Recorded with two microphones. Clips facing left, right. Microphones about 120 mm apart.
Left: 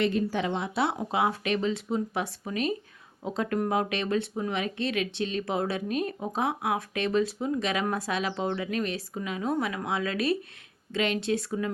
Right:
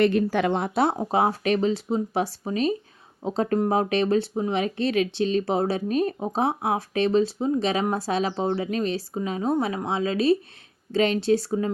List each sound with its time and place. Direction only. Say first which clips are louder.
0.0 s speech: right 6 dB; 65° right (ahead or behind); by 11.7 s 30° right (ahead or behind)